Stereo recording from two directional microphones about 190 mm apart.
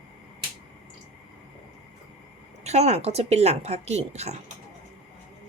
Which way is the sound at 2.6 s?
35° right (ahead or behind).